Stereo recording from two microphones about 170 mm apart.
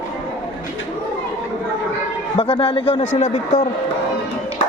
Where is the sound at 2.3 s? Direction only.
30° left (ahead or behind).